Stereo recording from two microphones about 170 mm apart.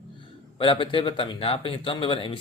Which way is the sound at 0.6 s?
30° left (ahead or behind).